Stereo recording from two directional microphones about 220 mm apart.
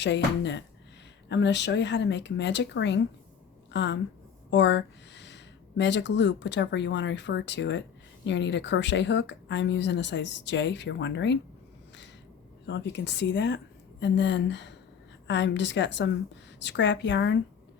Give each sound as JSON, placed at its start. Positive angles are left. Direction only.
{"t": 0.0, "sound": "a woman's voice", "side_deg": 50}
{"t": 12.6, "sound": "a woman's voice", "side_deg": 50}